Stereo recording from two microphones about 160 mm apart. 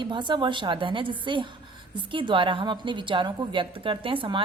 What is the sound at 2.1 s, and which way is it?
A woman's voice, 30° right (ahead or behind).